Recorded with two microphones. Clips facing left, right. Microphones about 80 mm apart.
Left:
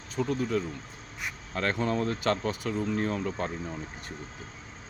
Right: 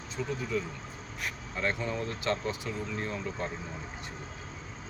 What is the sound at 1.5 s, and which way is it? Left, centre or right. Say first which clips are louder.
Speech: left 5 dB; left.